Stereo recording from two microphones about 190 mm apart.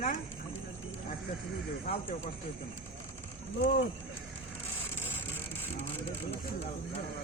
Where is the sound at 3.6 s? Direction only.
60° left (ahead or behind).